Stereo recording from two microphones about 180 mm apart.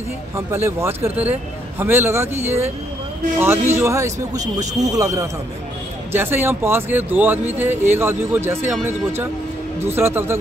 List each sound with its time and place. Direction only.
0.5 s a man's voice: 15° right (ahead or behind)